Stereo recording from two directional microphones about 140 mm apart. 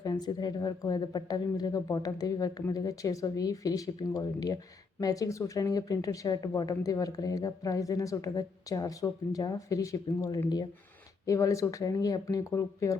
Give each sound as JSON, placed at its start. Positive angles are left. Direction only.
{"t": 0.0, "sound": "speech", "side_deg": 30}